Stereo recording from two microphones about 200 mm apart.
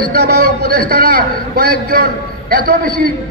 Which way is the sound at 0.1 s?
55° right (ahead or behind).